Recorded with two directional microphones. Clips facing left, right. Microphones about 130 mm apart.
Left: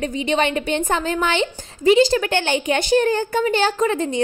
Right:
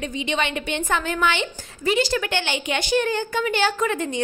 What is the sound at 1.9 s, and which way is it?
Speech, 25° left (ahead or behind).